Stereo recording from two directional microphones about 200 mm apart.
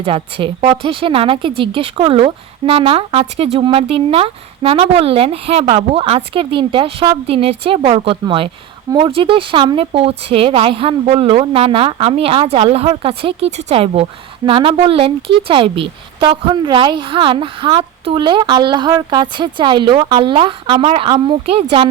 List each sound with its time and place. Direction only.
0.0 s a woman's voice: 25° right (ahead or behind)